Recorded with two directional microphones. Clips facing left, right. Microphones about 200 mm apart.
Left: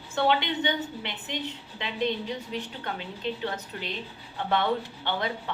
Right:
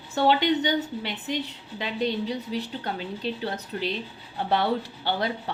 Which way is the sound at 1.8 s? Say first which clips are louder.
Right 2 dB; 35° right (ahead or behind).